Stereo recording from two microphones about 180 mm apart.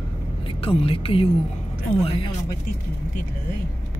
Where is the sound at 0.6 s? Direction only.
30° left (ahead or behind).